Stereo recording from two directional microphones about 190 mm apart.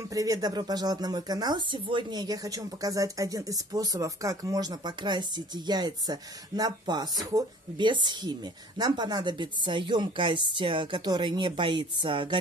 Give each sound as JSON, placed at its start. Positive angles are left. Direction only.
{"t": 0.1, "sound": "speech", "side_deg": -20}